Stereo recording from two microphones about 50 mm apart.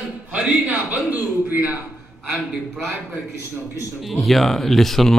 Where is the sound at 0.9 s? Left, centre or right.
Right.